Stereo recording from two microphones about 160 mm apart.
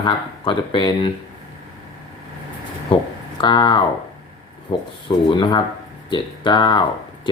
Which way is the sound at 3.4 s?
30° left (ahead or behind).